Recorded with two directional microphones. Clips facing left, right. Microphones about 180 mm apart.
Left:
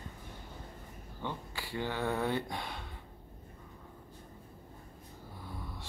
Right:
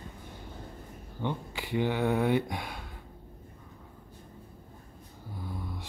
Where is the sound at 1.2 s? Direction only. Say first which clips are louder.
Right 6 dB; 20° right (ahead or behind).